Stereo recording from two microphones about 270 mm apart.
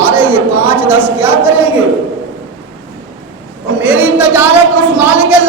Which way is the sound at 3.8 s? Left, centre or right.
Centre.